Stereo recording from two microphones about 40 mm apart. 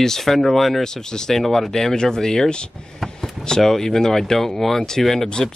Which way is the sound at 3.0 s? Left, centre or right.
Centre.